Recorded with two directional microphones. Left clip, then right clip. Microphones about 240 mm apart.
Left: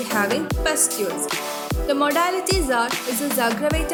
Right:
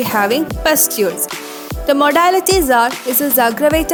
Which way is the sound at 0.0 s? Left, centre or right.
Right.